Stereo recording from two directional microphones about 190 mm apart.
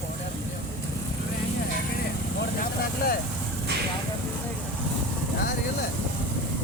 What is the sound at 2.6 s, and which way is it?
Vehicle, 50° left (ahead or behind).